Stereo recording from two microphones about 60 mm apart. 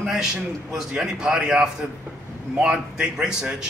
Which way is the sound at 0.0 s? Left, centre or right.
Centre.